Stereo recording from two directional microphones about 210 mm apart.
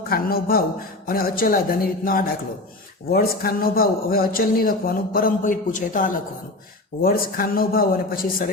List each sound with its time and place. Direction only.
0.1 s a man's voice: 45° left (ahead or behind)